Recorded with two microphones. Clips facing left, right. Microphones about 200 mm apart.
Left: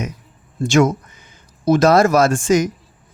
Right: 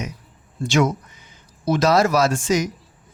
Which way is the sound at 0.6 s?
50° left (ahead or behind).